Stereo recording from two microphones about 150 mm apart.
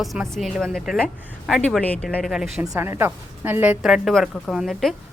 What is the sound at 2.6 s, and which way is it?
A woman's voice, 20° right (ahead or behind).